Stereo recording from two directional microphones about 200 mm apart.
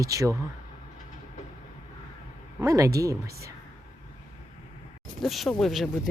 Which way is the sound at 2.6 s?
15° right (ahead or behind).